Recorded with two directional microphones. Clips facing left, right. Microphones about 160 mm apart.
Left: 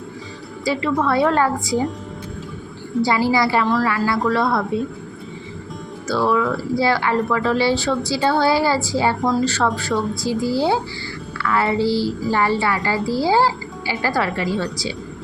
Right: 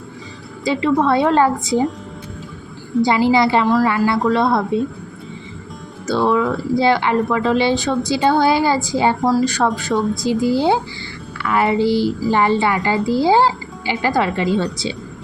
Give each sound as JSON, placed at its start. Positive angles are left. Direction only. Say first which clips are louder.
{"t": 0.6, "sound": "a woman's voice", "louder": "right 4 dB", "side_deg": -20}
{"t": 3.0, "sound": "a woman's voice", "louder": "right 3 dB", "side_deg": -20}
{"t": 6.1, "sound": "a woman's voice", "louder": "right 2 dB", "side_deg": -20}